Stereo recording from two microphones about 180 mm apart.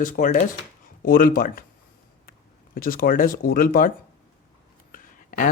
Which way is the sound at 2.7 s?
50° left (ahead or behind).